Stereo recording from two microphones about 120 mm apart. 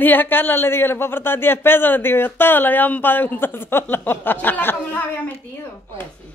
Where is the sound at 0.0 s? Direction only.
15° left (ahead or behind).